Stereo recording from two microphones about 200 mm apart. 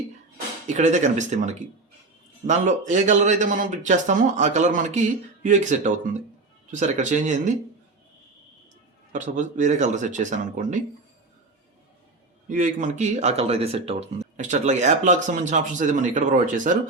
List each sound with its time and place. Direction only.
0.7 s speech: 35° right (ahead or behind)
9.1 s speech: 40° right (ahead or behind)
12.5 s speech: 40° right (ahead or behind)